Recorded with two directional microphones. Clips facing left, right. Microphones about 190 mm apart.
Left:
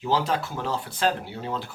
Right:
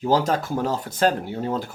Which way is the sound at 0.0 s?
45° right (ahead or behind).